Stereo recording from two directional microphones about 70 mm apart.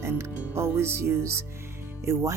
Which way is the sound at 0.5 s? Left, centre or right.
Right.